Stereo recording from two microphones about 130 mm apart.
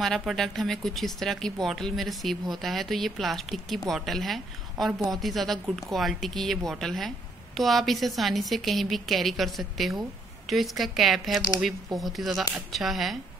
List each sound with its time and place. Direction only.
0.0 s speech: centre (ahead or behind)